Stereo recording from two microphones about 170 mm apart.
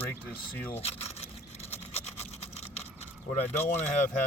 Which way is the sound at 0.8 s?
40° left (ahead or behind).